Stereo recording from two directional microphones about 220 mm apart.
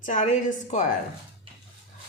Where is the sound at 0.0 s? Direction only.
35° left (ahead or behind).